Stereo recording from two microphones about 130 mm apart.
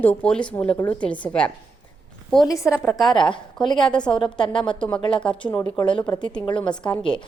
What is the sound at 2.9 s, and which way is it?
A woman's voice, centre (ahead or behind).